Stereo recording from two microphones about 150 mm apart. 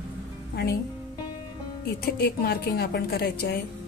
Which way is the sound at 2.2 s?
90° left.